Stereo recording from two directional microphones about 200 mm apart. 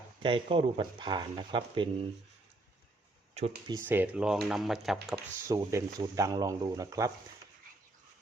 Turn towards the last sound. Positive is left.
turn(degrees=-15)  # may be behind; listen again after turning